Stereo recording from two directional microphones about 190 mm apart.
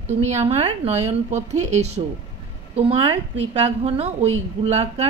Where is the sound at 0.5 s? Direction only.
35° right (ahead or behind).